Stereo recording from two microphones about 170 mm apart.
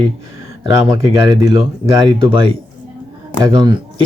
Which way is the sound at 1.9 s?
30° right (ahead or behind).